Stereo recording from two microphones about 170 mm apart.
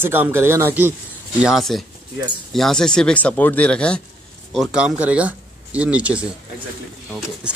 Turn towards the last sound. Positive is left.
turn(degrees=-5)  # may be behind; listen again after turning